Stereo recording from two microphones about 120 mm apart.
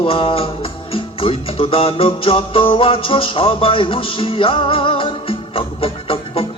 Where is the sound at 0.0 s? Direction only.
50° left (ahead or behind).